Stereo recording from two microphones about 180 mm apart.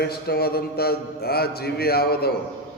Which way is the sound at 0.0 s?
60° left (ahead or behind).